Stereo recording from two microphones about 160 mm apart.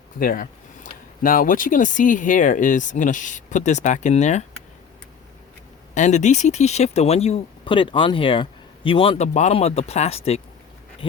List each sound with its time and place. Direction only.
0.2 s speech: 60° left (ahead or behind)
5.9 s speech: 50° left (ahead or behind)